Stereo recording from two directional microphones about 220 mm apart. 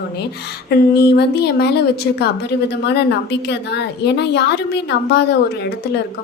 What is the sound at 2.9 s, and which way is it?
A woman's voice, 50° left (ahead or behind).